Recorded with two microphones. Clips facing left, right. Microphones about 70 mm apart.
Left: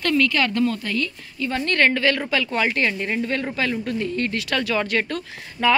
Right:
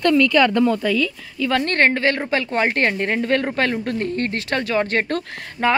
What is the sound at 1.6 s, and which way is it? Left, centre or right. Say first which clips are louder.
A woman's voice: left 1 dB; right.